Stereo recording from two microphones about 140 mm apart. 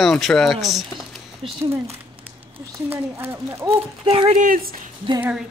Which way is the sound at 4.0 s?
40° right (ahead or behind).